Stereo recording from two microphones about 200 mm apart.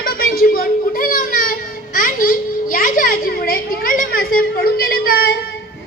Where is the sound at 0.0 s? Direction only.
45° left (ahead or behind).